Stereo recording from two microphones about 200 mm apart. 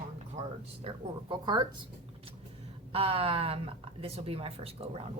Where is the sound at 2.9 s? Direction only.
30° right (ahead or behind).